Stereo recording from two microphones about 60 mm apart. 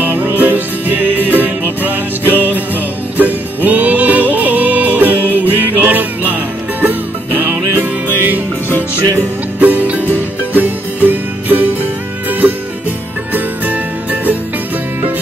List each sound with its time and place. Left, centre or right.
0.0 s music: right
9.6 s music: right